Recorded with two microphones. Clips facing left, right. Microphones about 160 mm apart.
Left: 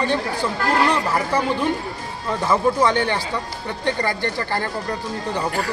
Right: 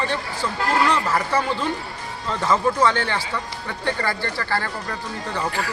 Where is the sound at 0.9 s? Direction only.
15° left (ahead or behind).